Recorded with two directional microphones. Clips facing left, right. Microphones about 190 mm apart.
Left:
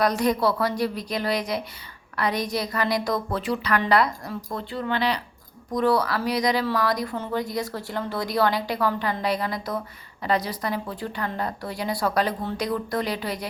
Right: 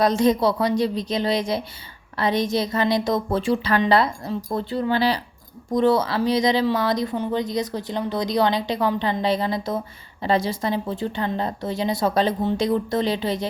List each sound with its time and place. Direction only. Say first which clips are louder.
0.0 s speech: right 3 dB; 25° right (ahead or behind)